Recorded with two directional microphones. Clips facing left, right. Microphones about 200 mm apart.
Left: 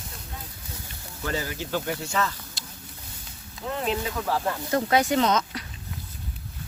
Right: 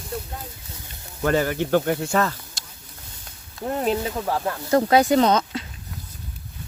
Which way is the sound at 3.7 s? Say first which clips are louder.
Right 5 dB; 45° right (ahead or behind).